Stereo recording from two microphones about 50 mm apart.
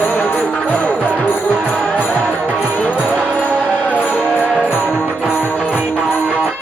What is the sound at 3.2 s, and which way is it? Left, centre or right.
Music, left.